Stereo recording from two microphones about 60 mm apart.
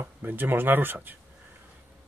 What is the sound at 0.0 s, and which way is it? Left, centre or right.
Speech, right.